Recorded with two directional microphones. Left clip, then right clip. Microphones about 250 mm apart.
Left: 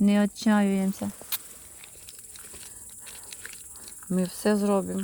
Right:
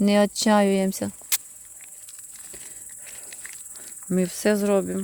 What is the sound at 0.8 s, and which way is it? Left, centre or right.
Speech, right.